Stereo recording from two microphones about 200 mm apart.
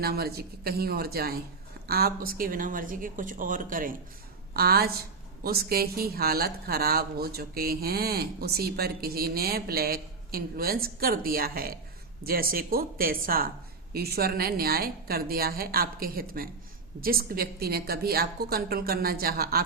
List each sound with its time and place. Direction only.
0.0 s speech: 50° right (ahead or behind)